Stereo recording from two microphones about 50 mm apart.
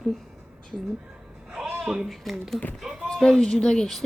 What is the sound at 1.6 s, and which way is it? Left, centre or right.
Speech, centre.